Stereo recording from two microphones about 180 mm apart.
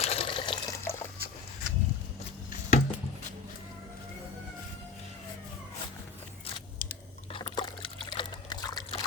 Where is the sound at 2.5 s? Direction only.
45° left (ahead or behind).